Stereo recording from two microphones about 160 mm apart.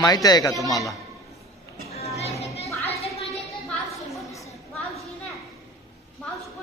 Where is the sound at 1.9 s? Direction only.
40° left (ahead or behind).